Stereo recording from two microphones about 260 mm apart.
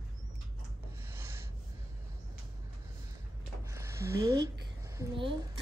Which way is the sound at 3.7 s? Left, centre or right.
Centre.